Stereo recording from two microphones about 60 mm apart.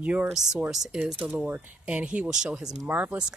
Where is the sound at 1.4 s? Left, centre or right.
Right.